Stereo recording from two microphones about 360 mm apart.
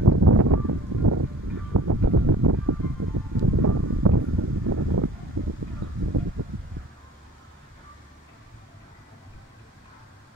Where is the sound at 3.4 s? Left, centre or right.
Right.